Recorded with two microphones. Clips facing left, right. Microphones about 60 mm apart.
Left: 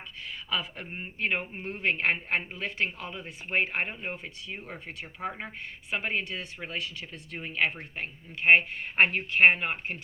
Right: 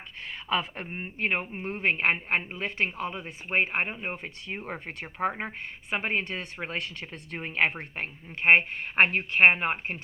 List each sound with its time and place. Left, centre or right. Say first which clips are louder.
0.2 s a sound: right 4 dB; right
0.9 s a woman's voice: right 1 dB; right
4.2 s speech: right 3 dB; right